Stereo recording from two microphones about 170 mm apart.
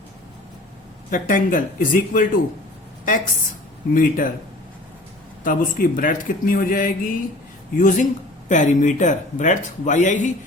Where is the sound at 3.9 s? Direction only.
55° left (ahead or behind).